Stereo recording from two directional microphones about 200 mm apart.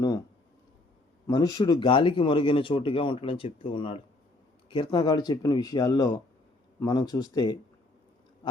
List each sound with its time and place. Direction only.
1.3 s speech: 20° left (ahead or behind)